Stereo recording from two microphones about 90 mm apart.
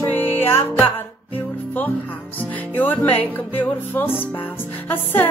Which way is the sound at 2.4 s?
20° left (ahead or behind).